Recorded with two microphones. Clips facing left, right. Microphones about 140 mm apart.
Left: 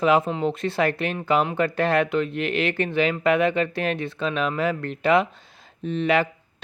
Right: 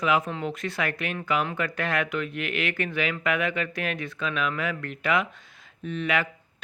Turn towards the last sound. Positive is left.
turn(degrees=30)  # may be behind; listen again after turning